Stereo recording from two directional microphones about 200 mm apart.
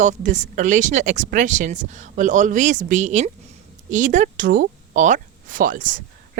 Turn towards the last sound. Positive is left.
turn(degrees=-45)  # may be behind; listen again after turning